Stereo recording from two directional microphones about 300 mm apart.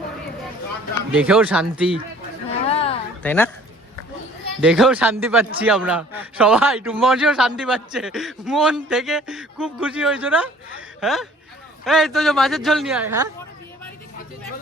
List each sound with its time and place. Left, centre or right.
1.2 s speech: centre
2.5 s a sound: centre
3.2 s speech: centre
4.6 s speech: centre